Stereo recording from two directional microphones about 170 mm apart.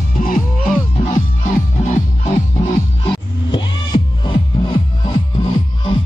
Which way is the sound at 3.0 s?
30° left (ahead or behind).